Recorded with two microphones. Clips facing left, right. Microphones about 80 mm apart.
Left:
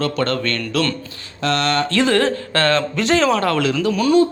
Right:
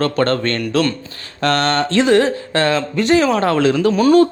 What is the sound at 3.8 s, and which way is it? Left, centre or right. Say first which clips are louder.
Speech: right 4 dB; right.